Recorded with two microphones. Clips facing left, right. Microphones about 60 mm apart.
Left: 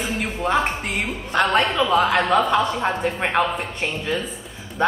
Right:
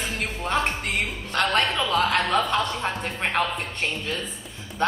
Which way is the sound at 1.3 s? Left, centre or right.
Centre.